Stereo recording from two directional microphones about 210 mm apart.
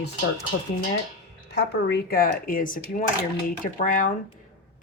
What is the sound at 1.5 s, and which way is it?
Speech, 50° left (ahead or behind).